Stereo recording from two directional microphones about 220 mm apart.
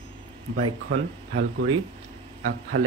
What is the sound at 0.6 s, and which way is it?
Speech, 90° right.